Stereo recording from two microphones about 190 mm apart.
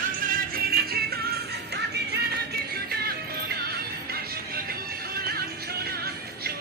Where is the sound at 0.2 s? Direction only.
50° right (ahead or behind).